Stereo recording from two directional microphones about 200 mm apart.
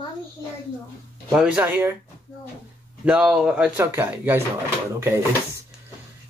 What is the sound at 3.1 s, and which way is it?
Speech, 5° right (ahead or behind).